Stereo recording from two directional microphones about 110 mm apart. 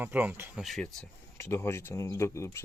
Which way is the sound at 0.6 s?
Centre (ahead or behind).